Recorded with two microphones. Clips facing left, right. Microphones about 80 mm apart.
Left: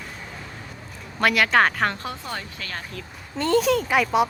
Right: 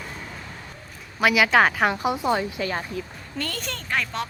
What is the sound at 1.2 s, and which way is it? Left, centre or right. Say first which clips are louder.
Speech: right 1 dB; centre.